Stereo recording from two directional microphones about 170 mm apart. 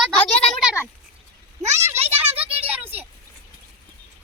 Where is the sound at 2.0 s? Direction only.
35° right (ahead or behind).